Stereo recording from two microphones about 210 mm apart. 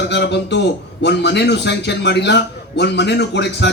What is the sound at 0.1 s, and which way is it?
A man's voice, 55° left (ahead or behind).